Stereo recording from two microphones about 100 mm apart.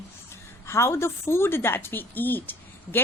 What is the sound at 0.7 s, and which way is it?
A woman's voice, 25° left (ahead or behind).